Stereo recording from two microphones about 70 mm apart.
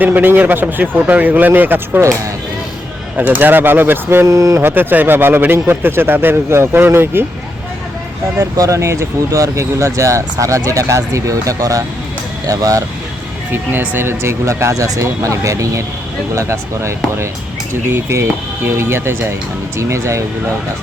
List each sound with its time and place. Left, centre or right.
0.0 s speech: right
3.2 s speech: right
4.3 s speech: right
4.6 s a man's voice: right
8.4 s speech: right
13.5 s speech: right
17.9 s a man's voice: right